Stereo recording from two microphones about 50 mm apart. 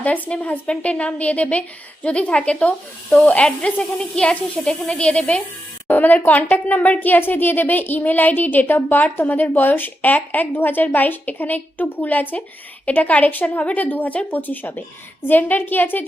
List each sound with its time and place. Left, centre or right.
0.0 s speech: left
5.9 s speech: left